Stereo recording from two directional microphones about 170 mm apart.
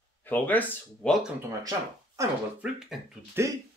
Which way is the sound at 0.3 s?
10° left (ahead or behind).